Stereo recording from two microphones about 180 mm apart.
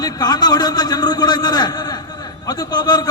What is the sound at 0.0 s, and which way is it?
A man's voice, 20° left (ahead or behind).